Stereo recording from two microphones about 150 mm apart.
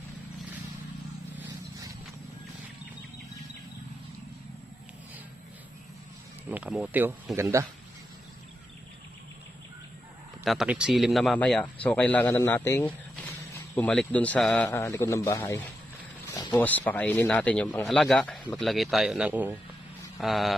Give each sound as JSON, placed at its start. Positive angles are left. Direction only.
{"t": 6.5, "sound": "a man's voice", "side_deg": -10}
{"t": 10.4, "sound": "speech", "side_deg": 0}
{"t": 16.3, "sound": "a sound", "side_deg": 25}
{"t": 16.5, "sound": "speech", "side_deg": 10}
{"t": 20.2, "sound": "speech", "side_deg": 0}